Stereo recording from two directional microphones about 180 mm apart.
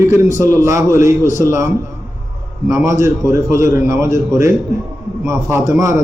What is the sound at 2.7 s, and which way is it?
A man's voice, 15° right (ahead or behind).